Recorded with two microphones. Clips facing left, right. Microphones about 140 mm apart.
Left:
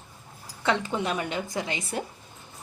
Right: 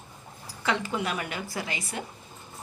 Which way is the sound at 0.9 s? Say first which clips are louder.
Left 3 dB; 25° left (ahead or behind).